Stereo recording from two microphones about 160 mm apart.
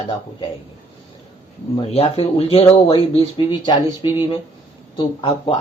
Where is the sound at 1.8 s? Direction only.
40° left (ahead or behind).